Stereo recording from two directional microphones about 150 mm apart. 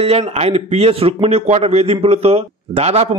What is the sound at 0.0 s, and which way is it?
A man's voice, 45° right (ahead or behind).